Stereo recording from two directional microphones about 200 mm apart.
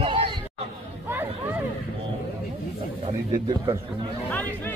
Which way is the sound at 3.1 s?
25° right (ahead or behind).